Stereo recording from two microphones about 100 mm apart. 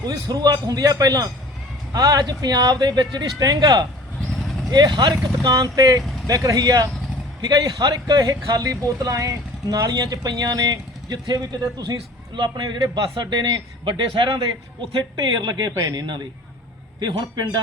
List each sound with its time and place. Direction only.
0.0 s speech: 40° right (ahead or behind)
5.1 s speech: 35° right (ahead or behind)